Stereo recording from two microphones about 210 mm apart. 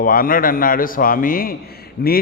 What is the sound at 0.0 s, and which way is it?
A man's voice, 40° left (ahead or behind).